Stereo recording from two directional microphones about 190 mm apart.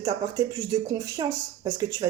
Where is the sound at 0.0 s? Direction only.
20° right (ahead or behind).